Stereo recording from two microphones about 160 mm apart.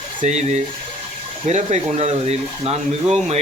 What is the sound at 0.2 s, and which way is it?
Speech, 45° right (ahead or behind).